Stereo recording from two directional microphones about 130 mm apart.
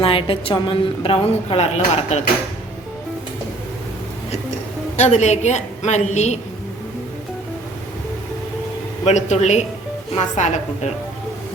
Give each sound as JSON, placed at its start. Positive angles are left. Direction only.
{"t": 0.0, "sound": "a woman's voice", "side_deg": 45}
{"t": 4.9, "sound": "a woman's voice", "side_deg": 60}
{"t": 9.0, "sound": "a woman's voice", "side_deg": 60}